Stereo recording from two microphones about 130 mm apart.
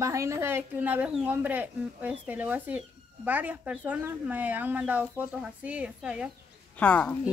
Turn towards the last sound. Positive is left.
turn(degrees=10)  # may be behind; listen again after turning